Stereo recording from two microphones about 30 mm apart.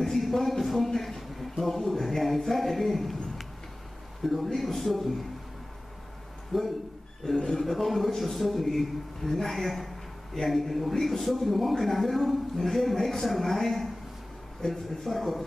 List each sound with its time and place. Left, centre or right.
0.0 s a man's voice: centre
6.5 s speech: centre
7.2 s speech: centre
7.6 s speech: centre